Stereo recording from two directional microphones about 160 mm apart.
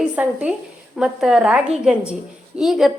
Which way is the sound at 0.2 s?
5° right (ahead or behind).